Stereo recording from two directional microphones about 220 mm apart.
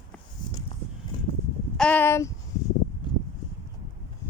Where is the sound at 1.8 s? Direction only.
5° left (ahead or behind).